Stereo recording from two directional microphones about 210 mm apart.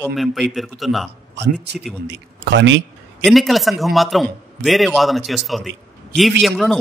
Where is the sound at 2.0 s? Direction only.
55° right (ahead or behind).